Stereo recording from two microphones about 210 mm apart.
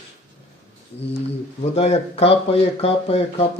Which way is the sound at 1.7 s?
30° left (ahead or behind).